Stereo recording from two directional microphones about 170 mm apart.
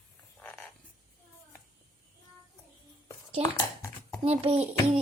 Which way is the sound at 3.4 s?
15° left (ahead or behind).